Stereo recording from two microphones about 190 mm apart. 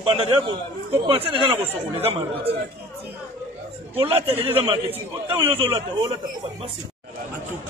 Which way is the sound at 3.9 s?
30° right (ahead or behind).